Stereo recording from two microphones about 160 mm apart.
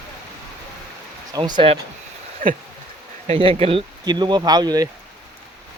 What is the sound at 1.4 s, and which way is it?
Speech, 30° right (ahead or behind).